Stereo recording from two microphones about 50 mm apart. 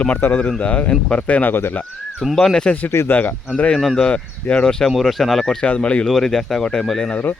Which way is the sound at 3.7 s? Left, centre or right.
Centre.